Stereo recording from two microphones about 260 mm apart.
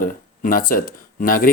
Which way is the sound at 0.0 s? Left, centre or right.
Left.